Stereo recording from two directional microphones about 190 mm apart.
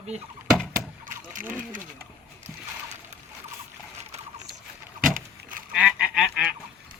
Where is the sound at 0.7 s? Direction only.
45° right (ahead or behind).